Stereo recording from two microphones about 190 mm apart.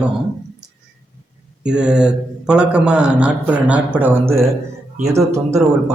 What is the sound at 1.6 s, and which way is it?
A man's voice, 5° right (ahead or behind).